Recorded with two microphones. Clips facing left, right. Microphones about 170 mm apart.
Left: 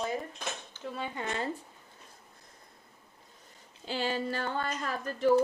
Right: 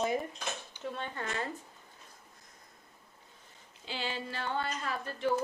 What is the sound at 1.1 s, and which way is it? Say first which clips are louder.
Speech: left 2 dB; 20° left (ahead or behind).